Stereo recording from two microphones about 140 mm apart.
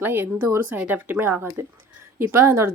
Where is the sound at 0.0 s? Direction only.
15° right (ahead or behind).